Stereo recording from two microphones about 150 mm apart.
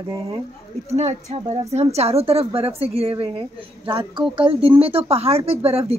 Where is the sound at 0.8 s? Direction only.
45° right (ahead or behind).